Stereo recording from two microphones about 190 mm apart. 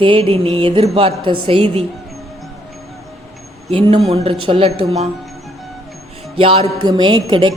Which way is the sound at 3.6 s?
30° right (ahead or behind).